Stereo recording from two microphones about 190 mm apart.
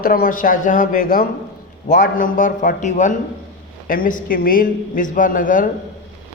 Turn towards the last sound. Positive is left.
turn(degrees=45)  # may be behind; listen again after turning